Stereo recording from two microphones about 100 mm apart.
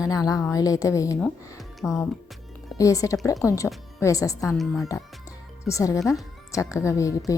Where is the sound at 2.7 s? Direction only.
35° left (ahead or behind).